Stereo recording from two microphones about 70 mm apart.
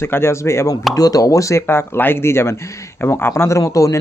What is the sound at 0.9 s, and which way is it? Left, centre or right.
Speech, left.